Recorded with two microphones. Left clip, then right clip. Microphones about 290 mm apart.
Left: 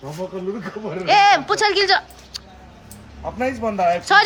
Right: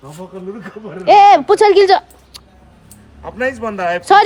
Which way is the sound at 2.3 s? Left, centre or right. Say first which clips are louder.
Left 4 dB; centre.